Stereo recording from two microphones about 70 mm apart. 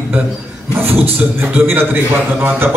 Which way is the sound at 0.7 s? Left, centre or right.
Right.